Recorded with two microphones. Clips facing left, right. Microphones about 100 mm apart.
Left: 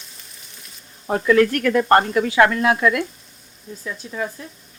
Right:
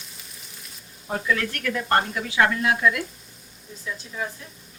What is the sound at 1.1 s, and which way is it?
Speech, 70° left (ahead or behind).